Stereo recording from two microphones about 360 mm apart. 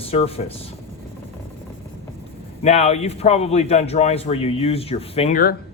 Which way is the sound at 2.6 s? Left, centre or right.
Centre.